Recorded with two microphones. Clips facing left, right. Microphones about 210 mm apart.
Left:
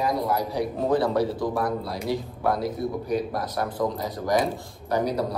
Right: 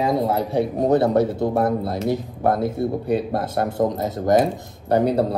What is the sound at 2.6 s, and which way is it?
A man's voice, 30° right (ahead or behind).